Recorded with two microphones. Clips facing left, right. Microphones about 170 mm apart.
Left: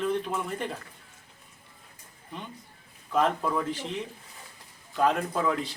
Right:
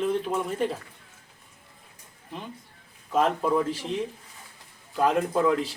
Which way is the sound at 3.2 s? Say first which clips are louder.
Right 4 dB; 10° right (ahead or behind).